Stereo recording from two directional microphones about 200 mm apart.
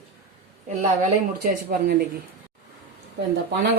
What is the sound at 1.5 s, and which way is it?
Speech, 50° right (ahead or behind).